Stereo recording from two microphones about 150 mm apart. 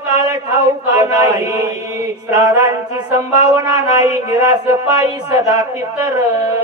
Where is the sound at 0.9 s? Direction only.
20° right (ahead or behind).